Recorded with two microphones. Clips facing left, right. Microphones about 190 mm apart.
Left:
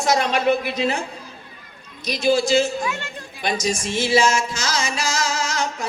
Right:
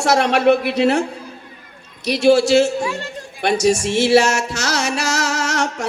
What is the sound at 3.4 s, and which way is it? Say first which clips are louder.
Music: right 7 dB; 70° right (ahead or behind).